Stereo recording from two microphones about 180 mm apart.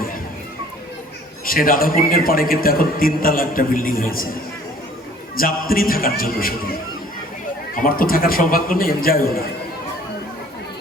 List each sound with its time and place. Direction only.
1.5 s a man's voice: 50° left (ahead or behind)
5.4 s a man's voice: 55° left (ahead or behind)
7.8 s a man's voice: 50° left (ahead or behind)